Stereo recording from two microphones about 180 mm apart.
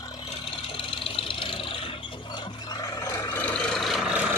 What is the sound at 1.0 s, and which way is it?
Engine, 30° left (ahead or behind).